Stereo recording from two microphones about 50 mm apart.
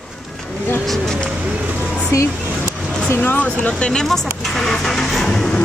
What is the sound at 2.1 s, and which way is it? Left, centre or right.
Music, left.